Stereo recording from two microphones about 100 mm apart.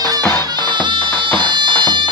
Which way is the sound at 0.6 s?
50° right (ahead or behind).